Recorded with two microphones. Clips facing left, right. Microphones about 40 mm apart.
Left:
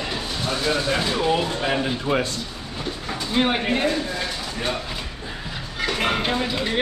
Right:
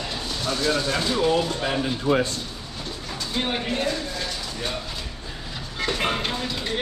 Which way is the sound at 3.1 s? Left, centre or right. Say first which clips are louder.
Left 5 dB; left.